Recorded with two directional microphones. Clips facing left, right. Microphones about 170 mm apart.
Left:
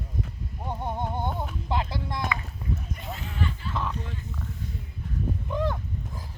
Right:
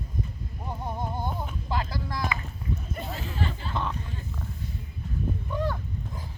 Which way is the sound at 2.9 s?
35° right (ahead or behind).